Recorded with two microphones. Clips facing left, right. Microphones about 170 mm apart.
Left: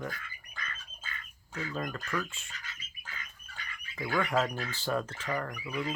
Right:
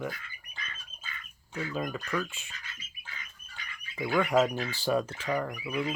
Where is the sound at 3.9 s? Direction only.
15° right (ahead or behind).